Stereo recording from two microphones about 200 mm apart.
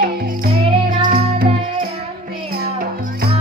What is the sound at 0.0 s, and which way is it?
Music, 50° right (ahead or behind).